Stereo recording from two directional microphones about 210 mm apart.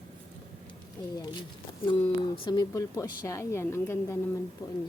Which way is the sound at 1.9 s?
25° left (ahead or behind).